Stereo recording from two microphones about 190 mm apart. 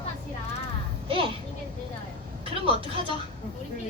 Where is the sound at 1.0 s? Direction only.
30° right (ahead or behind).